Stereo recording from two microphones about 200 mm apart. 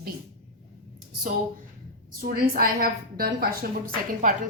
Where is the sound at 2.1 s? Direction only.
45° right (ahead or behind).